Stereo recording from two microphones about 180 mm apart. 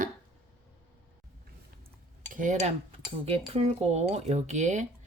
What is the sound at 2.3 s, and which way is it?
Speech, 45° right (ahead or behind).